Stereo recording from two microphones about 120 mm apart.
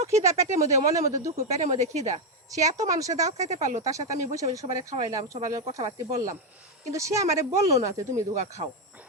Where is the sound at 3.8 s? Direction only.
30° right (ahead or behind).